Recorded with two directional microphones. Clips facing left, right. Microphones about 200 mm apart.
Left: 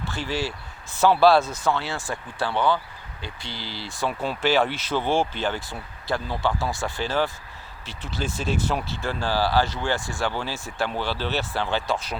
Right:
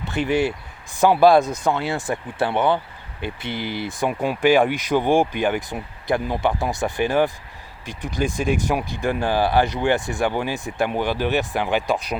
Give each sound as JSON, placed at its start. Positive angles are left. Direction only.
{"t": 0.0, "sound": "speech", "side_deg": -20}
{"t": 3.2, "sound": "speech", "side_deg": -60}
{"t": 3.8, "sound": "speech", "side_deg": -15}